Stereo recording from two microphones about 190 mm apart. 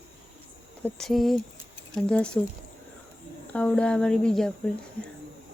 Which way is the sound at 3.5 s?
5° left (ahead or behind).